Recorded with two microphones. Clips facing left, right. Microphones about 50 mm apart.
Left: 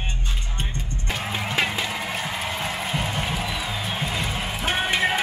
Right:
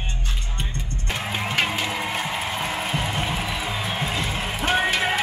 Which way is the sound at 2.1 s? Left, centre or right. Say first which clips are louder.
Right 2 dB; centre.